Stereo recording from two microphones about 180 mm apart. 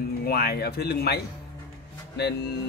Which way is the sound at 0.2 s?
60° left (ahead or behind).